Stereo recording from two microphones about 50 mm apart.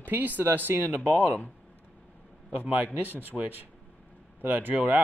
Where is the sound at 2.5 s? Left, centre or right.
Right.